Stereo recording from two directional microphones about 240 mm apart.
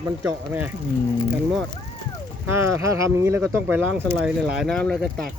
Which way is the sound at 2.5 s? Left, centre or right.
Centre.